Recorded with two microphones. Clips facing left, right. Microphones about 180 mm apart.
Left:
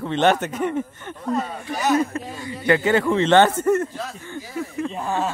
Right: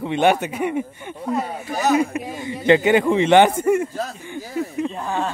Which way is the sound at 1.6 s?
40° right (ahead or behind).